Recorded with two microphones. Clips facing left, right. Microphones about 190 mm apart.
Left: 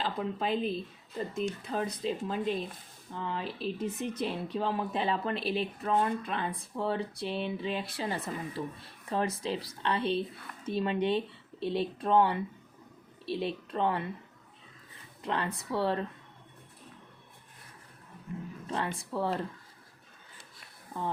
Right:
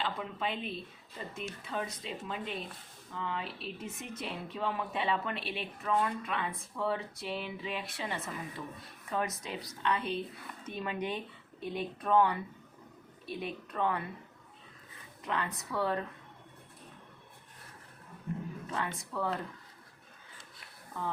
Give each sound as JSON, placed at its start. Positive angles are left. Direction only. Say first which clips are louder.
{"t": 0.0, "sound": "speech", "louder": "left 3 dB", "side_deg": 40}
{"t": 15.2, "sound": "speech", "louder": "left 3 dB", "side_deg": 30}
{"t": 18.7, "sound": "speech", "louder": "left 5 dB", "side_deg": 30}